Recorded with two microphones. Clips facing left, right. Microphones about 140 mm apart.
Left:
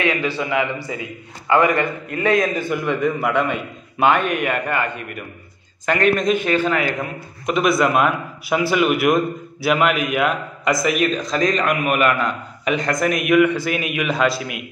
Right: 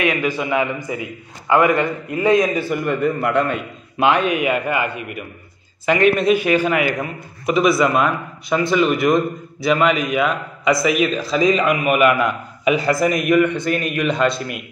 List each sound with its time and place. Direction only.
0.0 s a man's voice: 15° right (ahead or behind)
1.5 s a man's voice: 10° right (ahead or behind)
2.0 s a man's voice: 20° right (ahead or behind)
2.7 s a man's voice: centre (ahead or behind)